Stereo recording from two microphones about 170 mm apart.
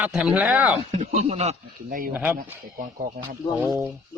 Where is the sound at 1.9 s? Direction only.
55° right (ahead or behind).